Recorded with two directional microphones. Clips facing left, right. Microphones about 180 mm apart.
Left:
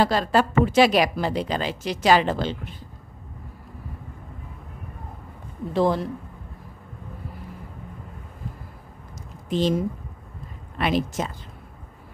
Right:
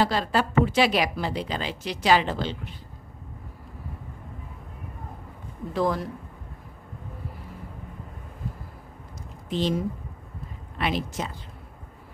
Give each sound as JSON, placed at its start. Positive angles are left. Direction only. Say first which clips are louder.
{"t": 0.0, "sound": "a woman's voice", "louder": "left 3 dB", "side_deg": 45}
{"t": 5.7, "sound": "speech", "louder": "left 4 dB", "side_deg": 25}
{"t": 9.5, "sound": "a woman's voice", "louder": "left 4 dB", "side_deg": 45}
{"t": 10.8, "sound": "a woman's voice", "louder": "left 4 dB", "side_deg": 45}